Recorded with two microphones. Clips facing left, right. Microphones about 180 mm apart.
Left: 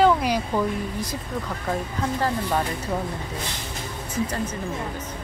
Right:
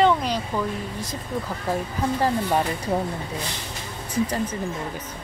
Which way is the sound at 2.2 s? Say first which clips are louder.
Right 2 dB; 20° right (ahead or behind).